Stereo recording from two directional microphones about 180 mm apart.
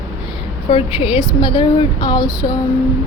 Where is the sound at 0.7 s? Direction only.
30° left (ahead or behind).